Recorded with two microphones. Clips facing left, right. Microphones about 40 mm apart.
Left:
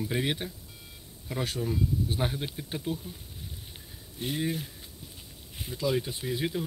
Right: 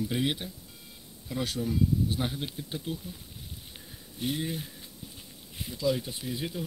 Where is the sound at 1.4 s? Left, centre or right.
Left.